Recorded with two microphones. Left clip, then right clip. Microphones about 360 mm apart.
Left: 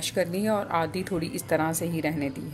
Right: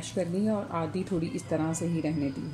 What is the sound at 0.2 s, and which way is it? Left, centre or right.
Speech, left.